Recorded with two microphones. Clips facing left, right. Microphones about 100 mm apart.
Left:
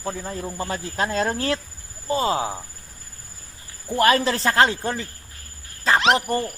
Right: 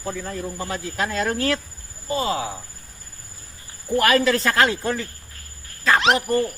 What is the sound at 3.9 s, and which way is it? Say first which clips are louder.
Speech: right 1 dB; 30° left (ahead or behind).